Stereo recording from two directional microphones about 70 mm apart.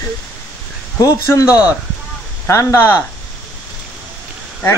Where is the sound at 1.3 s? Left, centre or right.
Left.